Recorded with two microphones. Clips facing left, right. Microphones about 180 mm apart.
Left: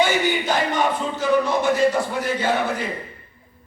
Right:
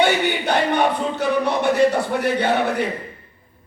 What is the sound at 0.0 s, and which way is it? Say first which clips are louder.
Music: right 1 dB; 65° right (ahead or behind).